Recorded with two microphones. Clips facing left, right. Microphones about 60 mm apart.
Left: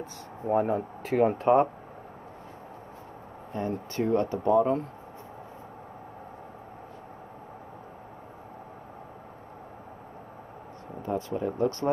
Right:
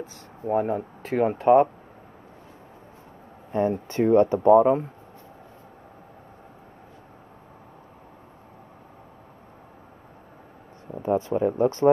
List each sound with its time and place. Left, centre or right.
0.5 s speech: centre
3.5 s speech: right
11.0 s speech: right